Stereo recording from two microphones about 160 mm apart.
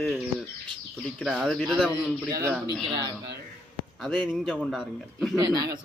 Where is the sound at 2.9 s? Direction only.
25° right (ahead or behind).